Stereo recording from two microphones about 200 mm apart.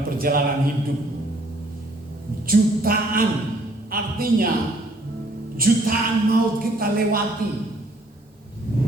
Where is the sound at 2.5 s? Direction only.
45° right (ahead or behind).